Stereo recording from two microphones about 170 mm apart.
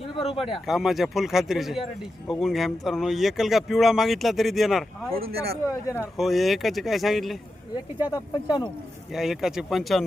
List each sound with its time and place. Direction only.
0.4 s speech: centre (ahead or behind)
5.1 s speech: 65° right (ahead or behind)
6.0 s speech: centre (ahead or behind)
8.1 s speech: 25° left (ahead or behind)
9.1 s speech: centre (ahead or behind)